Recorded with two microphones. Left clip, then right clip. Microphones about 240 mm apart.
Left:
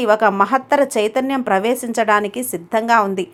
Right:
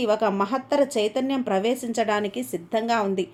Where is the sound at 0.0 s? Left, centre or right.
Centre.